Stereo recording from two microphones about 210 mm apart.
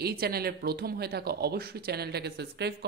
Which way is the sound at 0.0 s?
45° right (ahead or behind).